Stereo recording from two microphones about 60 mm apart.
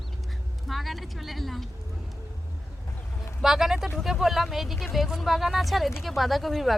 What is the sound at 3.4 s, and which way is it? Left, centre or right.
Speech, centre.